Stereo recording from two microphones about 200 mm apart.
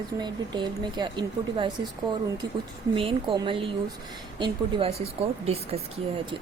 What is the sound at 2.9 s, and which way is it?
Speech, 25° right (ahead or behind).